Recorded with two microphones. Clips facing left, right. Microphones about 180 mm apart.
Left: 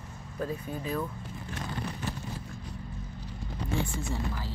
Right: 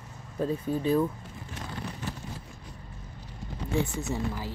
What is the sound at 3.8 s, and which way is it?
Speech, 20° right (ahead or behind).